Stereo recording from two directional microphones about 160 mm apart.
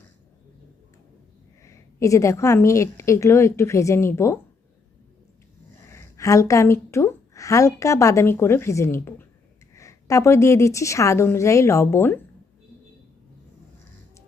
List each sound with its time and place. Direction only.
1.6 s a woman's voice: 20° left (ahead or behind)
5.9 s a woman's voice: 20° left (ahead or behind)